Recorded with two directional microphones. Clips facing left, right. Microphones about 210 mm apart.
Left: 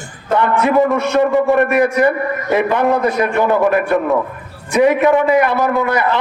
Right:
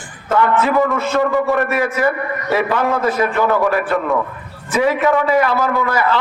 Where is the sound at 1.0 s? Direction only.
20° left (ahead or behind).